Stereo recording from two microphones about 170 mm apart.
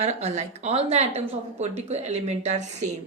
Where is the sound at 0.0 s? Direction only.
40° right (ahead or behind).